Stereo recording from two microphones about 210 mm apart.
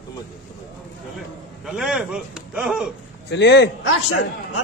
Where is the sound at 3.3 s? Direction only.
55° left (ahead or behind).